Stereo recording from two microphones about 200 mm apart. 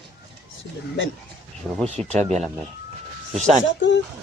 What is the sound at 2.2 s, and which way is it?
Speech, 35° right (ahead or behind).